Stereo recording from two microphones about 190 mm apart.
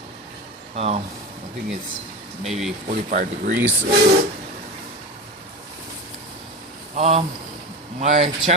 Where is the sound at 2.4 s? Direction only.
Centre (ahead or behind).